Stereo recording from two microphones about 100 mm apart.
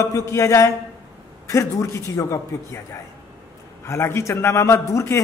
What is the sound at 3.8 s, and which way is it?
A man's voice, 25° left (ahead or behind).